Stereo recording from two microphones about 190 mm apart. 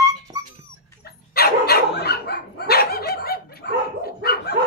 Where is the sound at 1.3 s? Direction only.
55° left (ahead or behind).